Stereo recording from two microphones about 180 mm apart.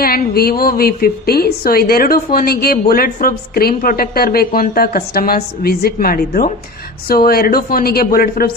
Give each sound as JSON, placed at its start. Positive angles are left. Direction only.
{"t": 0.0, "sound": "a woman's voice", "side_deg": 55}